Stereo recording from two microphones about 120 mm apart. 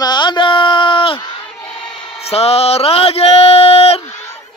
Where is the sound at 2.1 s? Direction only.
60° left (ahead or behind).